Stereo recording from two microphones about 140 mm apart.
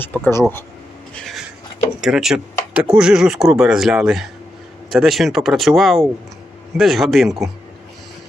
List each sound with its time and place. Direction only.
0.0 s speech: 15° left (ahead or behind)
1.1 s a sound: centre (ahead or behind)
2.0 s speech: 5° right (ahead or behind)